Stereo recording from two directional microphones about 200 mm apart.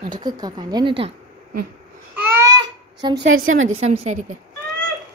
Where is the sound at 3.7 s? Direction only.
35° right (ahead or behind).